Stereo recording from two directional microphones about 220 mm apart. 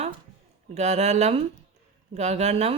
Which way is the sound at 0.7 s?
30° right (ahead or behind).